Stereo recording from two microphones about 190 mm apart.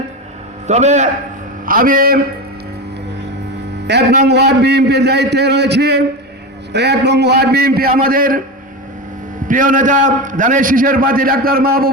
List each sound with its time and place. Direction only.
0.7 s a man's voice: 35° right (ahead or behind)
3.8 s a man's voice: 60° right (ahead or behind)
9.5 s a man's voice: 45° right (ahead or behind)